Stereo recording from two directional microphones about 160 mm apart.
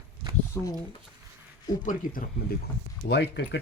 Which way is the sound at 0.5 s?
15° left (ahead or behind).